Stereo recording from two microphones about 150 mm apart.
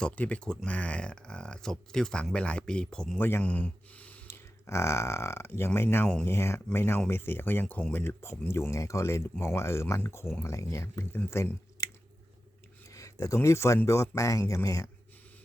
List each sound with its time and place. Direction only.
0.0 s speech: 10° left (ahead or behind)
12.9 s speech: 20° left (ahead or behind)